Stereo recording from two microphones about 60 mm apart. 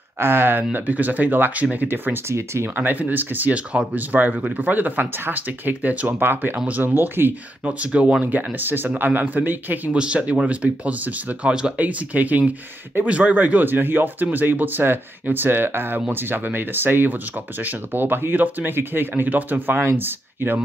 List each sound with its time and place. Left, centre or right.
0.2 s speech: right
2.2 s speech: right
2.7 s speech: right
7.6 s speech: right
8.5 s speech: right
9.9 s speech: centre
11.7 s speech: right